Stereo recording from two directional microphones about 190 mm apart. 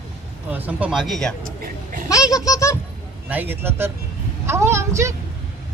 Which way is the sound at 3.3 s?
10° right (ahead or behind).